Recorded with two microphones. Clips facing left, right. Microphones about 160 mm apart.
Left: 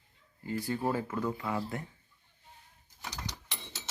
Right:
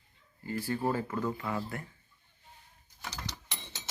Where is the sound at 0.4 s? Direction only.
15° left (ahead or behind).